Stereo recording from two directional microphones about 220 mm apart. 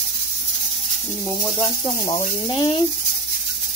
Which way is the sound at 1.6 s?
20° left (ahead or behind).